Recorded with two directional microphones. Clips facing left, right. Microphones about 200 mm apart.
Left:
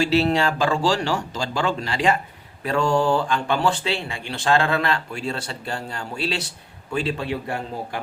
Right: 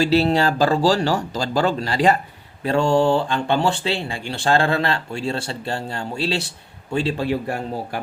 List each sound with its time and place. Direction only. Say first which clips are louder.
0.0 s speech: right 2 dB; 35° right (ahead or behind)